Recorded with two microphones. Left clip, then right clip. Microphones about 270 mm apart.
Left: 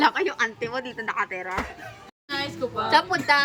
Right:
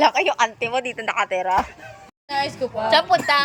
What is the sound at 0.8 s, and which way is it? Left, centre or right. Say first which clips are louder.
Speech: right 5 dB; right.